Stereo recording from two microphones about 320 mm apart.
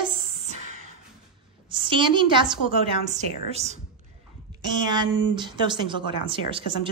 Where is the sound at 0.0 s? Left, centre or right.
Centre.